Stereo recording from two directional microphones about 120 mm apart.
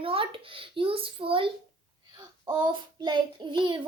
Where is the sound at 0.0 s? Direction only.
50° right (ahead or behind).